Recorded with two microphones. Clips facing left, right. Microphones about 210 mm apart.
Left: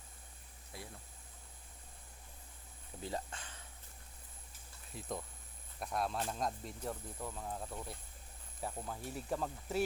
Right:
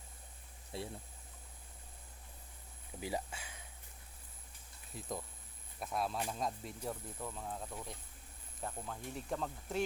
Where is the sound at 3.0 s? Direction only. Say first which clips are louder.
Right 2 dB; 10° right (ahead or behind).